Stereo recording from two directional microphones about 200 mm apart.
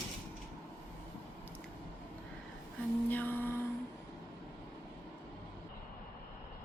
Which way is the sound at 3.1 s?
10° left (ahead or behind).